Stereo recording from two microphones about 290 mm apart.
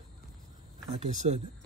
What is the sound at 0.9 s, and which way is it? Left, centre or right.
Speech, right.